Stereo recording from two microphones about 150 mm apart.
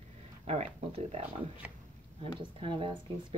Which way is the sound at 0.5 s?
45° right (ahead or behind).